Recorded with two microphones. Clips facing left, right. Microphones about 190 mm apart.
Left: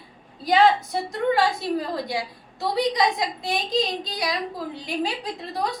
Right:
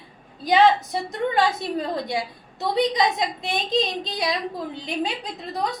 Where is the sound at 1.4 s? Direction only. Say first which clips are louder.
Even; 25° right (ahead or behind).